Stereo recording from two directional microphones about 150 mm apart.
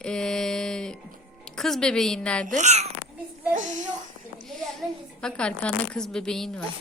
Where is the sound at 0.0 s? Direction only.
5° left (ahead or behind).